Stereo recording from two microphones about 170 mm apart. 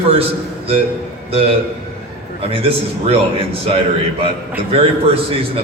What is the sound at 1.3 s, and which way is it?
A man's voice, 35° right (ahead or behind).